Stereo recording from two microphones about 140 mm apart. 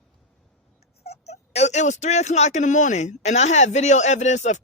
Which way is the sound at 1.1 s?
50° left (ahead or behind).